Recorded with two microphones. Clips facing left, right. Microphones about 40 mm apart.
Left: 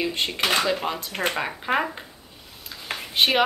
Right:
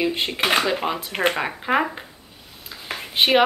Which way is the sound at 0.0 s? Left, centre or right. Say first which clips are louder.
Right 3 dB; centre.